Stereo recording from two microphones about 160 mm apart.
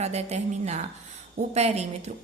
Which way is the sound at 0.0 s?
45° right (ahead or behind).